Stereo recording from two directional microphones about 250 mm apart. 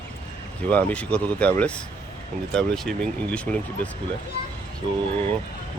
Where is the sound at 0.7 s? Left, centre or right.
Centre.